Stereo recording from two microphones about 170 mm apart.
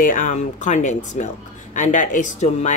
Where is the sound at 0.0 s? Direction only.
50° left (ahead or behind).